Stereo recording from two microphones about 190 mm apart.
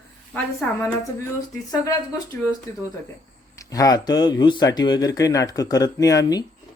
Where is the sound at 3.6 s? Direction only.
20° left (ahead or behind).